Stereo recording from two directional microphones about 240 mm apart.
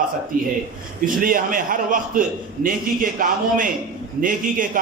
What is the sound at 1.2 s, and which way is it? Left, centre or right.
A man's voice, right.